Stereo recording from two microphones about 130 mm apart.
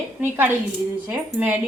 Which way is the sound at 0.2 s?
15° right (ahead or behind).